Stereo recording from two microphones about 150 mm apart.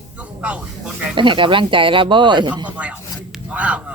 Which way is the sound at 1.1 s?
35° right (ahead or behind).